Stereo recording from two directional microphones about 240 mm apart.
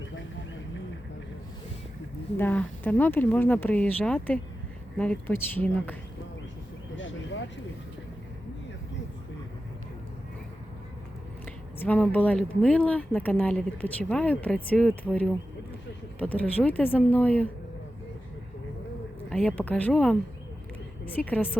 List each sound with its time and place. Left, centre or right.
2.4 s speech: centre
6.9 s a sound: left
11.8 s speech: centre
19.3 s speech: centre